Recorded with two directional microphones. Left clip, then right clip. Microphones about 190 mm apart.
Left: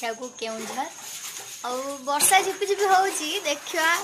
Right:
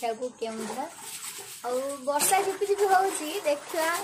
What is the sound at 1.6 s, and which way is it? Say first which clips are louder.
A woman's voice: even; centre (ahead or behind).